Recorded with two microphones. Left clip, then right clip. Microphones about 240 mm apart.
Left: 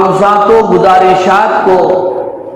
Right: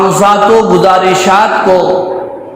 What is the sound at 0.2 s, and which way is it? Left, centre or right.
Speech, right.